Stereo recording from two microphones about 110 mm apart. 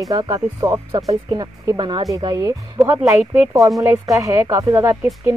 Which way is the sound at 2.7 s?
20° right (ahead or behind).